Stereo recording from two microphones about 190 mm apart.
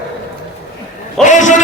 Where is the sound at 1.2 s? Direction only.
40° left (ahead or behind).